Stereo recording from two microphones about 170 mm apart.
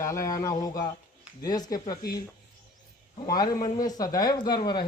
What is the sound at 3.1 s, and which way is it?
Speech, 25° left (ahead or behind).